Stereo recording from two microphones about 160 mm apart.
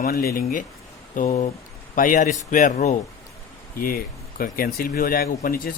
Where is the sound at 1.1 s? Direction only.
50° left (ahead or behind).